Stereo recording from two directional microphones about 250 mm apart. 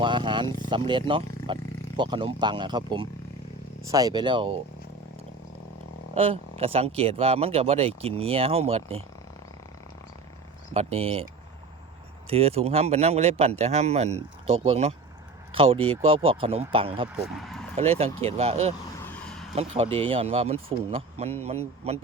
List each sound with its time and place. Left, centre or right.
0.0 s speech: centre
6.1 s speech: right
10.8 s speech: right
12.3 s speech: right
17.1 s speech: centre
17.7 s speech: right
19.0 s a sound: centre
19.7 s speech: right